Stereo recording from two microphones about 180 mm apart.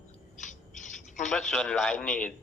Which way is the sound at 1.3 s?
5° left (ahead or behind).